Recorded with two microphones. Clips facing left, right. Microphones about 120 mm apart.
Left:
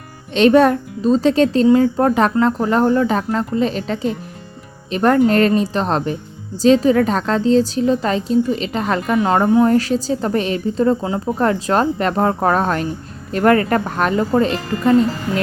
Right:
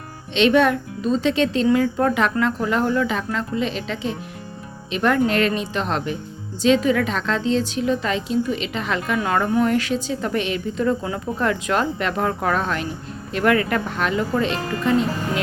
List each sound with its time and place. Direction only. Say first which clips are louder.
0.3 s a woman's voice: left 5 dB; 40° left (ahead or behind)
9.1 s speech: left 6 dB; 25° left (ahead or behind)
9.6 s a woman's voice: left 5 dB; 40° left (ahead or behind)